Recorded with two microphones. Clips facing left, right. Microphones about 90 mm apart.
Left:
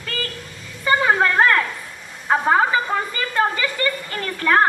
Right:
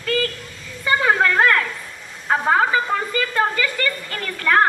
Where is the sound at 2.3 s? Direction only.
20° left (ahead or behind).